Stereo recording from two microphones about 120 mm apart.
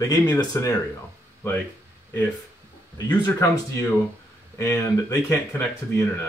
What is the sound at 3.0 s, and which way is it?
A man's voice, 25° left (ahead or behind).